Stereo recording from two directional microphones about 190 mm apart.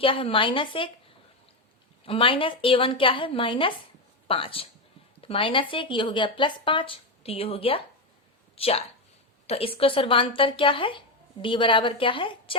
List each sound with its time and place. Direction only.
0.0 s speech: 30° left (ahead or behind)
2.0 s a woman's voice: 25° left (ahead or behind)